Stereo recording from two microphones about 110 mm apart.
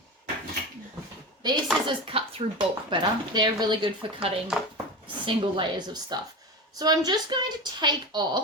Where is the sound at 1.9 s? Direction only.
55° right (ahead or behind).